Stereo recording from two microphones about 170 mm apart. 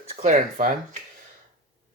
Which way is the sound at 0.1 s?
40° right (ahead or behind).